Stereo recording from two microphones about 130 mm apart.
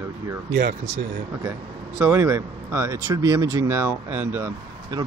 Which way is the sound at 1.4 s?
20° right (ahead or behind).